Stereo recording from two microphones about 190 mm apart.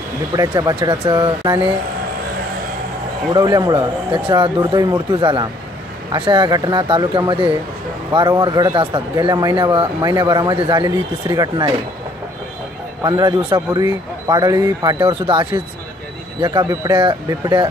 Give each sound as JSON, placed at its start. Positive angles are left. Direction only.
{"t": 0.4, "sound": "speech", "side_deg": -20}
{"t": 3.3, "sound": "speech", "side_deg": -20}
{"t": 13.0, "sound": "speech", "side_deg": -20}